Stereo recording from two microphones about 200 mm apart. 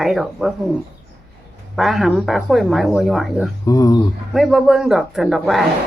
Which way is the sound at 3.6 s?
20° left (ahead or behind).